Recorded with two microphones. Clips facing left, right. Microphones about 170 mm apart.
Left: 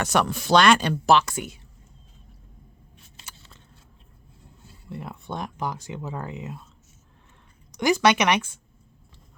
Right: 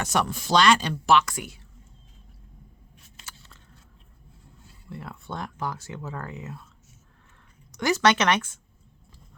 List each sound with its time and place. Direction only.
0.0 s speech: 65° left (ahead or behind)
1.0 s speech: 30° left (ahead or behind)
4.9 s speech: 20° left (ahead or behind)
7.7 s speech: 15° left (ahead or behind)